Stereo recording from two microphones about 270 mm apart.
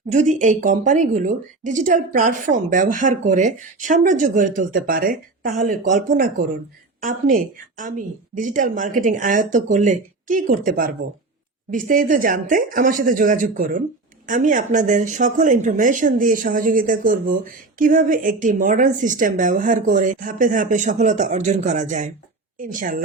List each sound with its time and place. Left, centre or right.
0.1 s speech: right
7.0 s speech: right